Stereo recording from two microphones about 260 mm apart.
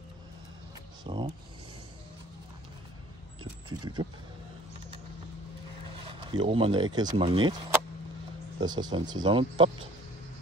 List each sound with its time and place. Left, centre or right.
1.0 s speech: right
3.6 s speech: centre
6.0 s speech: centre